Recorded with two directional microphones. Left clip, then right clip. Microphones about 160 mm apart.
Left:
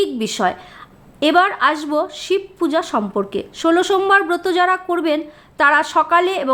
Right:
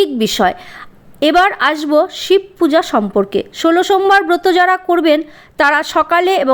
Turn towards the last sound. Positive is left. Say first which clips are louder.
# right 3 dB
turn(degrees=-25)  # may be behind; listen again after turning